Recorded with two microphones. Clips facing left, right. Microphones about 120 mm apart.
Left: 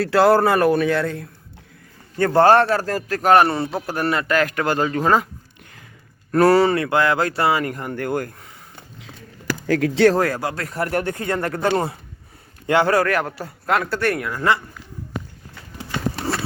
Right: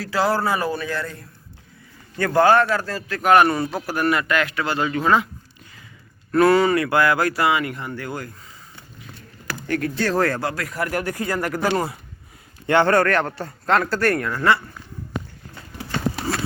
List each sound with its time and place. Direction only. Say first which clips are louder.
0.0 s a man's voice: left 6 dB; 65° left (ahead or behind)
2.1 s speech: left 2 dB; 30° left (ahead or behind)
6.3 s speech: left 1 dB; 40° left (ahead or behind); by 9.1 s 75° left (ahead or behind)
9.6 s speech: left 8 dB; 90° left
10.2 s speech: even; 15° left (ahead or behind)
10.6 s speech: left 2 dB; 30° left (ahead or behind)
12.6 s a man's voice: even; 5° left (ahead or behind)
14.3 s speech: right 1 dB; 15° left (ahead or behind)